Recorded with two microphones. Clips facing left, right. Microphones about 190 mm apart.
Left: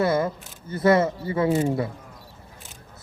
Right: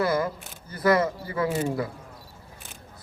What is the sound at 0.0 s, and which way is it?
Camera, 25° left (ahead or behind).